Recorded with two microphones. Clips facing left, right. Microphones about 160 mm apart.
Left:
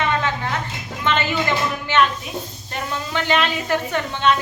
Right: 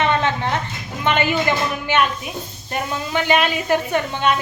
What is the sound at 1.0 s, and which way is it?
A woman's voice, 15° right (ahead or behind).